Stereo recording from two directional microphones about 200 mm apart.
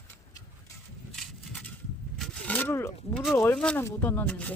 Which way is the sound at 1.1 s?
Centre (ahead or behind).